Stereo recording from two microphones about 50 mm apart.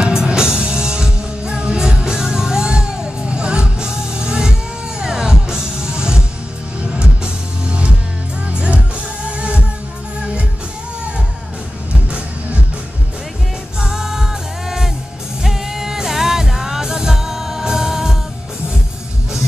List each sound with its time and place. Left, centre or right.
0.0 s music: centre
7.6 s music: right
11.9 s music: right
13.7 s music: centre